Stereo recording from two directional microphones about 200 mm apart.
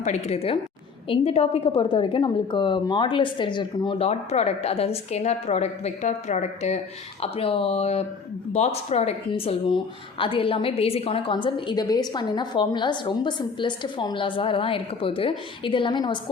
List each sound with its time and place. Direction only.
0.0 s a woman's voice: 35° left (ahead or behind)